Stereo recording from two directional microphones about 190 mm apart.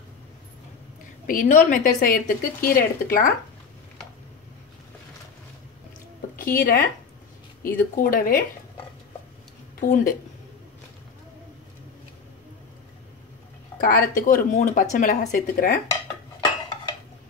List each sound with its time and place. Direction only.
1.2 s speech: 45° left (ahead or behind)
6.3 s speech: 50° left (ahead or behind)
9.8 s speech: 45° left (ahead or behind)
13.7 s speech: 50° left (ahead or behind)